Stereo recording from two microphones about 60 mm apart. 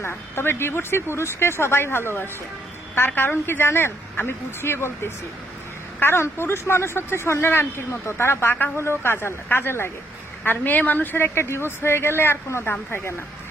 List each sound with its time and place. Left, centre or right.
0.0 s speech: left